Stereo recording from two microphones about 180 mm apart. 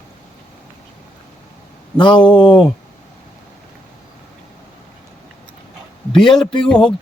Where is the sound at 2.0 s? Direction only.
25° left (ahead or behind).